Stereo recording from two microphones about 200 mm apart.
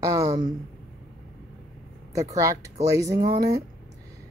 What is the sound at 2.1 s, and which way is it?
Speech, 15° right (ahead or behind).